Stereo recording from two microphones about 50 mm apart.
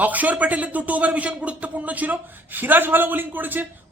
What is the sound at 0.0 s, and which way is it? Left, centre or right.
Speech, right.